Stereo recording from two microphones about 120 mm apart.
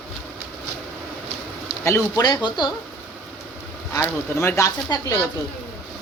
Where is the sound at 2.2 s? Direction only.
35° left (ahead or behind).